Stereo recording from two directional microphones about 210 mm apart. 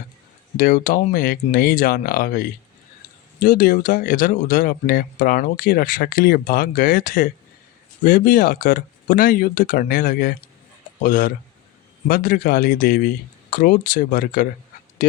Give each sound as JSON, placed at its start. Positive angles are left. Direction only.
{"t": 0.5, "sound": "speech", "side_deg": 40}